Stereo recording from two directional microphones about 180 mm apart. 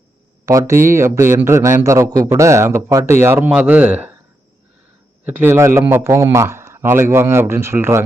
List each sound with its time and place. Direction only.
0.4 s a man's voice: 15° right (ahead or behind)
5.2 s a man's voice: 10° right (ahead or behind)